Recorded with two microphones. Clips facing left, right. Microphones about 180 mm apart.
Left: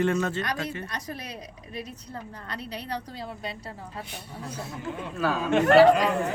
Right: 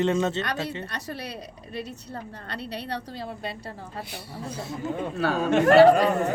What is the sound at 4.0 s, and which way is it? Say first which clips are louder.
Speech: right 2 dB; 10° right (ahead or behind).